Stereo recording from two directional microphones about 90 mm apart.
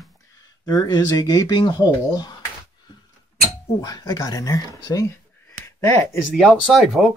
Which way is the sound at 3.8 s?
45° left (ahead or behind).